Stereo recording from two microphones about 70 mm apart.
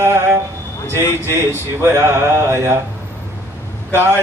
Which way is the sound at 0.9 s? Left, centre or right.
Left.